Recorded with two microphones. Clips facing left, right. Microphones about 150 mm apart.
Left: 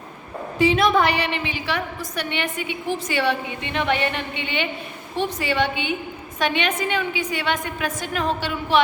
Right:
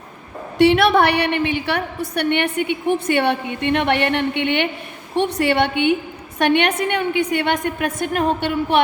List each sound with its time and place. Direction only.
0.6 s a woman's voice: 70° right (ahead or behind)